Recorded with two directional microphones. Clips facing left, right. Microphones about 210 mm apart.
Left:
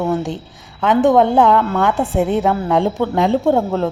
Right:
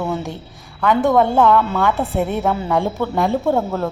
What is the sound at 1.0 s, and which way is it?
Speech, 15° left (ahead or behind).